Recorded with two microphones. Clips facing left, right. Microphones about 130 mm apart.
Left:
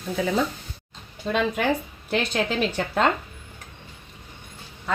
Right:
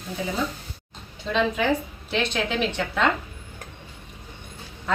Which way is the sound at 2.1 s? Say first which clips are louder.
Left 1 dB; 40° left (ahead or behind).